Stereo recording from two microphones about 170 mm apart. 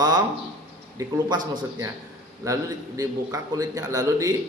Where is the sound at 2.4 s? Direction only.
20° right (ahead or behind).